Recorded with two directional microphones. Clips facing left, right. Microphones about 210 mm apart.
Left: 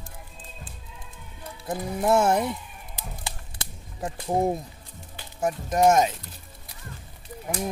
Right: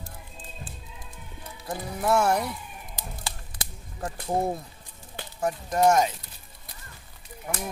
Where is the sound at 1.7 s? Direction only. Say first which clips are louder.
Left 3 dB; 25° left (ahead or behind).